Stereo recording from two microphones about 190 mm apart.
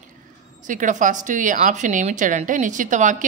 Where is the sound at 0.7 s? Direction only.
40° right (ahead or behind).